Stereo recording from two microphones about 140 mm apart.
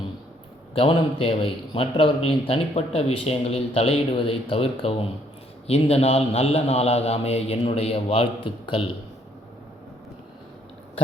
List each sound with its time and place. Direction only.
0.7 s a man's voice: 40° left (ahead or behind)